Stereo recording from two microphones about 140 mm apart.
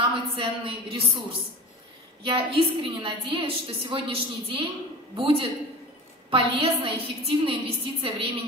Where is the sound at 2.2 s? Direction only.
40° right (ahead or behind).